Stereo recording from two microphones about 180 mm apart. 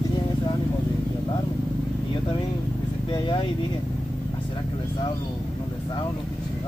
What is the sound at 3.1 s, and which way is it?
Vehicle, 25° left (ahead or behind).